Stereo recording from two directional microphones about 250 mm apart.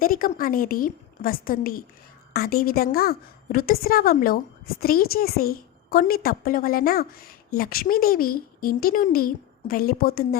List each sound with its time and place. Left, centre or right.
0.0 s a woman's voice: left